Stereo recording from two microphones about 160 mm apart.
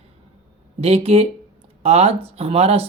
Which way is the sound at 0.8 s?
40° right (ahead or behind).